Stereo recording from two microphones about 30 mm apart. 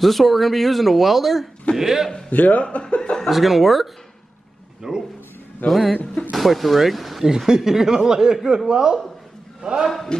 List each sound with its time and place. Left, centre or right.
0.0 s speech: centre
1.8 s a man's voice: centre
2.3 s speech: left
2.8 s speech: left
3.3 s speech: centre
4.8 s a man's voice: centre
5.7 s speech: centre
7.2 s a man's voice: centre